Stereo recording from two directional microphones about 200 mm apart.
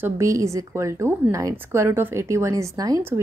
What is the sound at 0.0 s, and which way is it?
A woman's voice, 15° right (ahead or behind).